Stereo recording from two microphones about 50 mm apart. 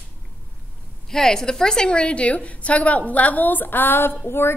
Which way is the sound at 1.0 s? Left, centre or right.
Centre.